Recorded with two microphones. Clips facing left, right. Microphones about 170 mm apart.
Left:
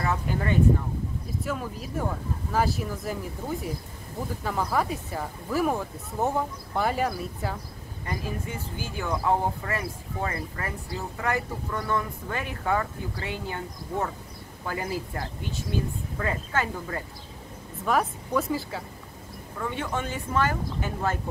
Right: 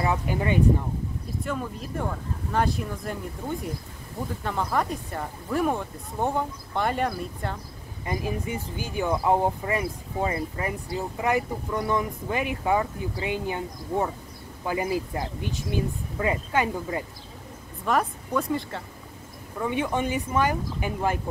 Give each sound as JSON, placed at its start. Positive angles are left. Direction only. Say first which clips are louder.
{"t": 0.0, "sound": "speech", "louder": "right 2 dB", "side_deg": -15}
{"t": 1.4, "sound": "speech", "louder": "right 1 dB", "side_deg": 0}
{"t": 8.0, "sound": "speech", "louder": "right 4 dB", "side_deg": -15}
{"t": 17.8, "sound": "speech", "louder": "even", "side_deg": 0}
{"t": 19.6, "sound": "speech", "louder": "right 5 dB", "side_deg": -15}